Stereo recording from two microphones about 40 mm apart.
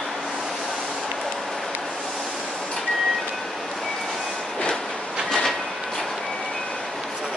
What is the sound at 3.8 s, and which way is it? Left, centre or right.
Train, centre.